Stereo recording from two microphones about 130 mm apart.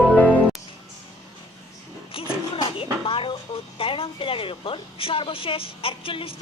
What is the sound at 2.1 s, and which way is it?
Music, 45° left (ahead or behind).